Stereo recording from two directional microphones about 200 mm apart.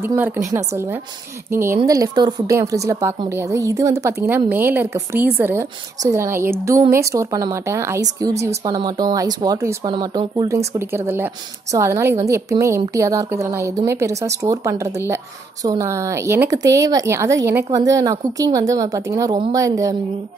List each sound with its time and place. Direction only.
0.5 s a woman's voice: 15° right (ahead or behind)